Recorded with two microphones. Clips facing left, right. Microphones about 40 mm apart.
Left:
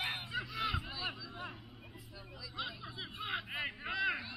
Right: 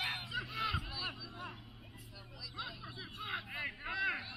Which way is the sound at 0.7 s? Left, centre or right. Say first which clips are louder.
Left 1 dB; left.